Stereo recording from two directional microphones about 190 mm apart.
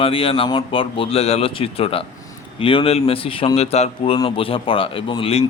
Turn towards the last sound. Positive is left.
turn(degrees=30)  # may be behind; listen again after turning